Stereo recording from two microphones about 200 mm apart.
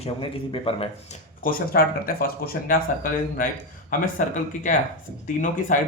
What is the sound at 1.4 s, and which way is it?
Speech, 45° left (ahead or behind).